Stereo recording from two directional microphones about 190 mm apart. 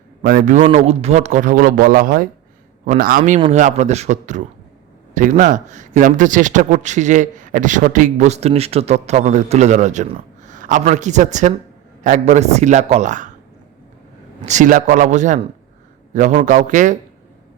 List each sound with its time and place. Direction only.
0.2 s a man's voice: 45° right (ahead or behind)
14.4 s a man's voice: 40° right (ahead or behind)